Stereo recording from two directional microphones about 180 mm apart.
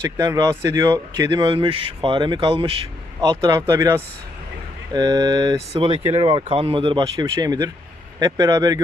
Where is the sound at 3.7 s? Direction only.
15° right (ahead or behind).